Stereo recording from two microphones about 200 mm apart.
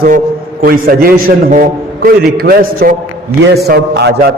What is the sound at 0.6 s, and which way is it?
A man's voice, 45° right (ahead or behind).